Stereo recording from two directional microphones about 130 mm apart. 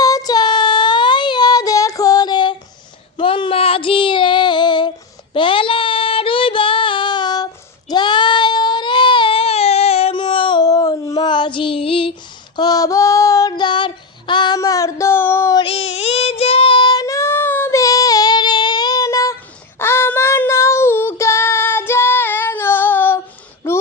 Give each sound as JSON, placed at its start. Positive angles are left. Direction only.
{"t": 0.0, "sound": "child singing", "side_deg": 30}
{"t": 7.9, "sound": "baby cry", "side_deg": 35}
{"t": 12.5, "sound": "female singing", "side_deg": 30}
{"t": 13.5, "sound": "female singing", "side_deg": 35}
{"t": 15.5, "sound": "child singing", "side_deg": 45}
{"t": 23.6, "sound": "a sound", "side_deg": 15}